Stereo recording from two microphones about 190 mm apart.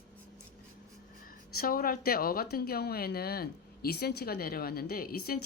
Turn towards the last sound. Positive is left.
turn(degrees=50)  # may be behind; listen again after turning